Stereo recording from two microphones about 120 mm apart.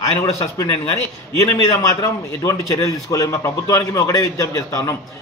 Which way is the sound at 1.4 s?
30° left (ahead or behind).